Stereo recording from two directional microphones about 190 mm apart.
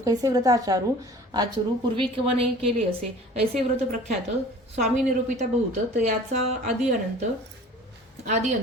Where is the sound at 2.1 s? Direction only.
30° right (ahead or behind).